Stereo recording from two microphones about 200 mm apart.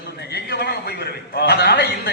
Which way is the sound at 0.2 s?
55° left (ahead or behind).